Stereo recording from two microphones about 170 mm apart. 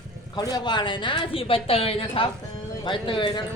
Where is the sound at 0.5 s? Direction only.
25° left (ahead or behind).